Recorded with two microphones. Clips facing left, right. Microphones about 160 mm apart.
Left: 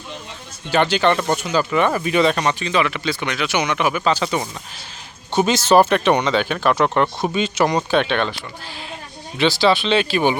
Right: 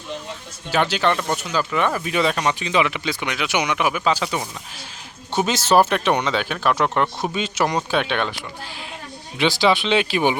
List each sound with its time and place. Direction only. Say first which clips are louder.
0.7 s speech: left 3 dB; 5° right (ahead or behind)